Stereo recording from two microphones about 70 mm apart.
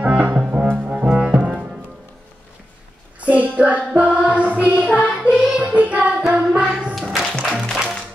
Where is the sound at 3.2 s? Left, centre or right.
Right.